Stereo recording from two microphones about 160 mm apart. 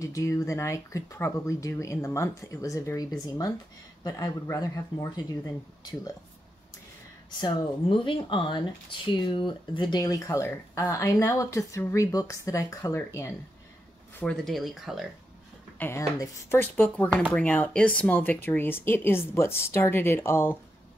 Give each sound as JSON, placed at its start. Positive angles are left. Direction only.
{"t": 0.0, "sound": "speech", "side_deg": 20}
{"t": 7.2, "sound": "speech", "side_deg": 30}
{"t": 14.2, "sound": "speech", "side_deg": 5}
{"t": 15.8, "sound": "speech", "side_deg": 20}